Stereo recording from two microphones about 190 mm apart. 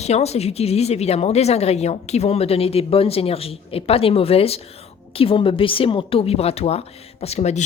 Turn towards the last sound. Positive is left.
turn(degrees=35)  # may be behind; listen again after turning